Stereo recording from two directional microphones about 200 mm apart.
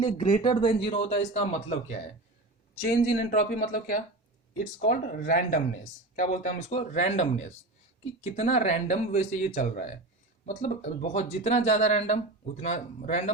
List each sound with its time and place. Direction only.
0.0 s speech: 25° left (ahead or behind)
3.2 s speech: 40° left (ahead or behind)